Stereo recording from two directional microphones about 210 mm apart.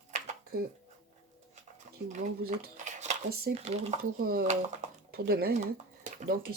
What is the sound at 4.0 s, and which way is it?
Speech, 45° right (ahead or behind).